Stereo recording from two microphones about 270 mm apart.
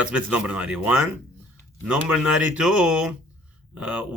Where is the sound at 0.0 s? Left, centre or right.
Centre.